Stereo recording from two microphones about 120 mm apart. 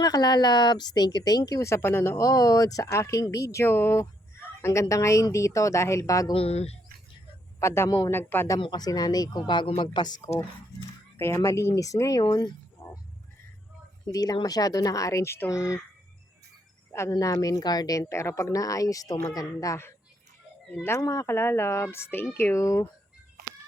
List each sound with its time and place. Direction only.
0.0 s speech: 35° left (ahead or behind)
6.3 s speech: 55° left (ahead or behind)
7.6 s speech: 25° left (ahead or behind)
8.6 s speech: 35° left (ahead or behind)
11.2 s speech: 25° left (ahead or behind)
12.3 s dog: 30° left (ahead or behind)
14.1 s speech: 30° left (ahead or behind)
16.9 s speech: 25° left (ahead or behind)